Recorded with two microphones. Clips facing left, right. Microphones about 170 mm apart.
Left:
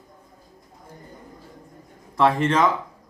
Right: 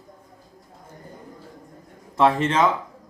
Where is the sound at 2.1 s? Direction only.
25° right (ahead or behind).